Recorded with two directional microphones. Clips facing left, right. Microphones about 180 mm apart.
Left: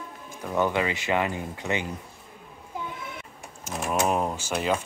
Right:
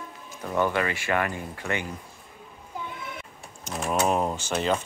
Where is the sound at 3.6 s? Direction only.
5° left (ahead or behind).